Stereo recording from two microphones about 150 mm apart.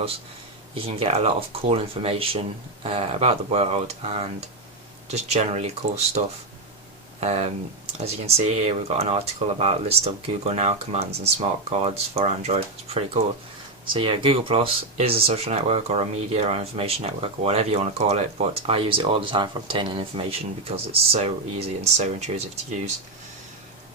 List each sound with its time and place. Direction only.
0.7 s speech: 40° right (ahead or behind)